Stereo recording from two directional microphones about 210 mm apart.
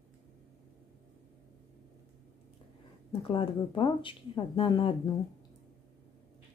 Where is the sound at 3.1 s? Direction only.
25° left (ahead or behind).